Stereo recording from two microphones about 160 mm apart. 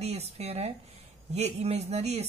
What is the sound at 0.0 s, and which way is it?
Speech, 40° right (ahead or behind).